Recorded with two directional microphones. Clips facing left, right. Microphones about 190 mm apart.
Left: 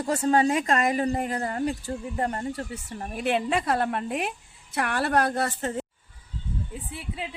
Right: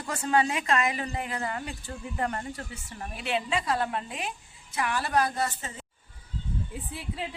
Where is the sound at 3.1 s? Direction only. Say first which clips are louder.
Left 5 dB; 50° left (ahead or behind).